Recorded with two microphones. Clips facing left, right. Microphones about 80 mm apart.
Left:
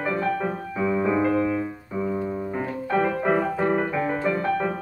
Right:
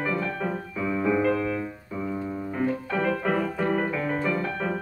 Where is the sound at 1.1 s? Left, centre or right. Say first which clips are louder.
Left 2 dB; left.